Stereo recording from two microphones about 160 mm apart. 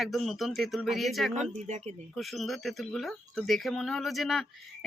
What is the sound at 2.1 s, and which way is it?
Speech, centre (ahead or behind).